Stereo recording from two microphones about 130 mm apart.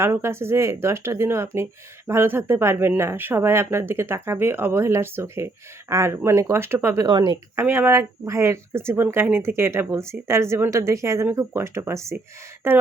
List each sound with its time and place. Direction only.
0.0 s speech: 20° right (ahead or behind)
7.1 s speech: 35° right (ahead or behind)
7.5 s speech: 15° right (ahead or behind)